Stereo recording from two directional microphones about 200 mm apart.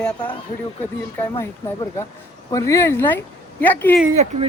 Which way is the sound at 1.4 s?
15° left (ahead or behind).